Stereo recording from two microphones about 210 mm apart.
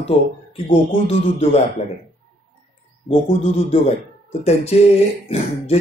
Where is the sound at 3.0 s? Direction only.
30° left (ahead or behind).